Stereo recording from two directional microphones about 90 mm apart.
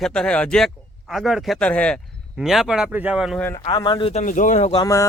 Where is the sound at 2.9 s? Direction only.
20° right (ahead or behind).